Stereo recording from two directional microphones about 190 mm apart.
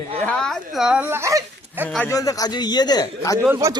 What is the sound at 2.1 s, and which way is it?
Speech, 20° left (ahead or behind).